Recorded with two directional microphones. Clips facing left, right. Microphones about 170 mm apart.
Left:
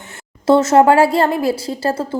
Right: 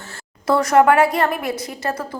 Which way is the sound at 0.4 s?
25° left (ahead or behind).